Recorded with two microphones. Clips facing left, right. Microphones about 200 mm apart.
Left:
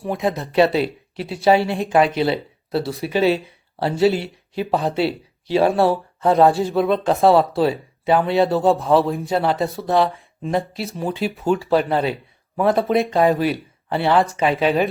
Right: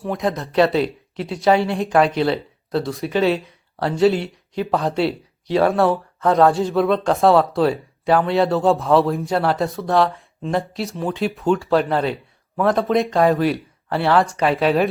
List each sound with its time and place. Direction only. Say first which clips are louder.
0.2 s speech: left 1 dB; 5° left (ahead or behind)
5.5 s speech: even; 25° left (ahead or behind)
6.4 s speech: even; 5° left (ahead or behind)